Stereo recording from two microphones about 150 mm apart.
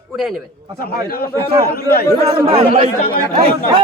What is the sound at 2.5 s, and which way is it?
Speech, 40° right (ahead or behind).